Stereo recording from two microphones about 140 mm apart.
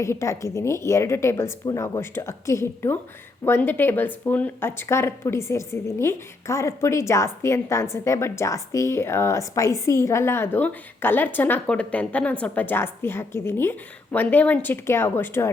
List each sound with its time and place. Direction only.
0.0 s a woman's voice: 20° left (ahead or behind)